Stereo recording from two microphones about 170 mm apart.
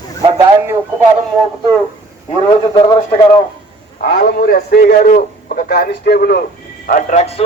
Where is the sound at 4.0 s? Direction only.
55° left (ahead or behind).